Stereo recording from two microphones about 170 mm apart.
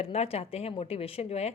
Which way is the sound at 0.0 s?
40° left (ahead or behind).